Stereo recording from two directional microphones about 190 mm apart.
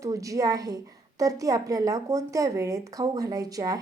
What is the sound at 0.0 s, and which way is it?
A woman's voice, 15° right (ahead or behind).